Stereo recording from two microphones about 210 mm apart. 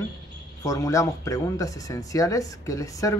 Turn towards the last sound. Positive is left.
turn(degrees=15)  # may be behind; listen again after turning